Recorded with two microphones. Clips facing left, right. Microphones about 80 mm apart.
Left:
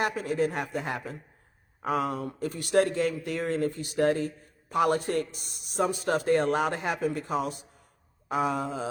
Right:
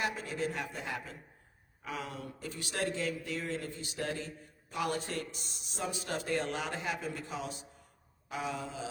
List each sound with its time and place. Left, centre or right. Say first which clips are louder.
0.0 s a man's voice: left 8 dB; left